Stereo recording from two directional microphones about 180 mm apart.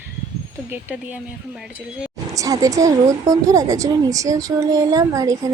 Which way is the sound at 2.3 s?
20° right (ahead or behind).